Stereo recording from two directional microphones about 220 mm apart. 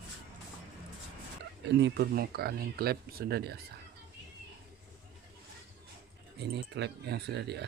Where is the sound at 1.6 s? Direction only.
50° right (ahead or behind).